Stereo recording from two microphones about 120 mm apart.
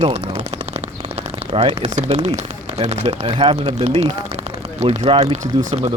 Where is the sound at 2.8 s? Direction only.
55° right (ahead or behind).